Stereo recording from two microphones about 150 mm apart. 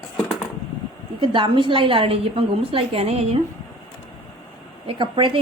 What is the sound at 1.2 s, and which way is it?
A woman's voice, 35° right (ahead or behind).